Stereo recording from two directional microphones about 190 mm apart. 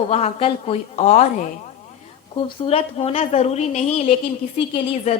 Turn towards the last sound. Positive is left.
turn(degrees=30)  # may be behind; listen again after turning